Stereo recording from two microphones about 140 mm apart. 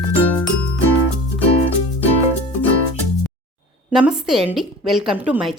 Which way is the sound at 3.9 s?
5° right (ahead or behind).